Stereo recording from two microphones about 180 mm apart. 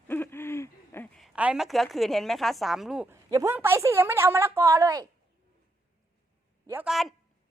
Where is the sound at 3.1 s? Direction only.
15° right (ahead or behind).